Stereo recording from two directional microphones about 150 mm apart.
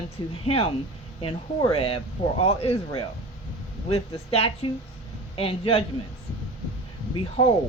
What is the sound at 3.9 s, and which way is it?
A woman's voice, 40° left (ahead or behind).